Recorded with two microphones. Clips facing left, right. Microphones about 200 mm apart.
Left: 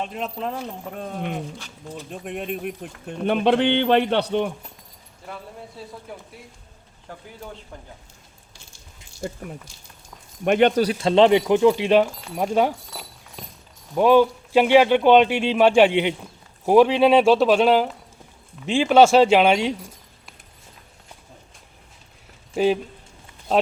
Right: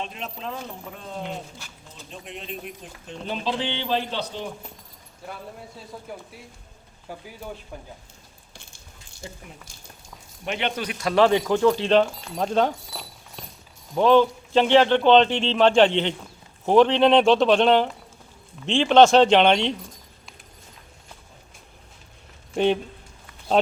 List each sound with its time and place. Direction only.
0.0 s speech: 50° left (ahead or behind)
6.1 s speech: centre (ahead or behind)
9.2 s speech: 50° left (ahead or behind); by 12.7 s 10° left (ahead or behind)
12.9 s horse: 10° right (ahead or behind)
13.4 s clip-clop: centre (ahead or behind)
13.9 s speech: 10° left (ahead or behind)
22.5 s speech: 5° left (ahead or behind)